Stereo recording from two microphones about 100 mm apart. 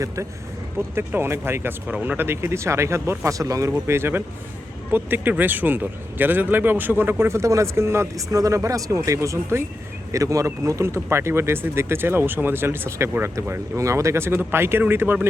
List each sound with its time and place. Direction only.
0.9 s speech: 25° right (ahead or behind)